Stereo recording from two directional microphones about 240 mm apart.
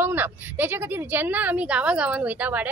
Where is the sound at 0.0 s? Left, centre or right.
Centre.